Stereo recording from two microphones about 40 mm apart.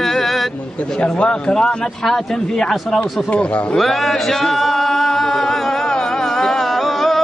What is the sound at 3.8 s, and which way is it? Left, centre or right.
Male singing, centre.